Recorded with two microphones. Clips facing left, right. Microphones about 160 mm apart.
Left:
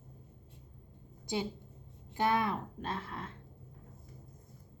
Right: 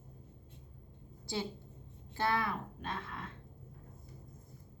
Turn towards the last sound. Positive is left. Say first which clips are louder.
# left 3 dB
turn(degrees=30)  # may be behind; listen again after turning